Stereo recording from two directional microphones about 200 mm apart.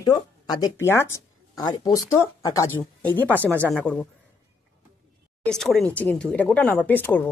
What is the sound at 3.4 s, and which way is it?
Speech, 10° right (ahead or behind).